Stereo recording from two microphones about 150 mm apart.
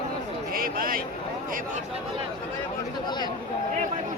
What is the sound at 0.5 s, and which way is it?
Speech, 75° right (ahead or behind).